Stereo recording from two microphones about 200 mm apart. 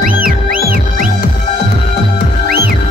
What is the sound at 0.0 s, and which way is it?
Music, 45° right (ahead or behind).